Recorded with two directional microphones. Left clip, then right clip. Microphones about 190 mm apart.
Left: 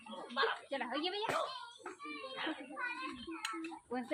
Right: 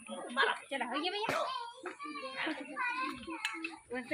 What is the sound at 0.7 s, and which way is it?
Speech, 45° right (ahead or behind).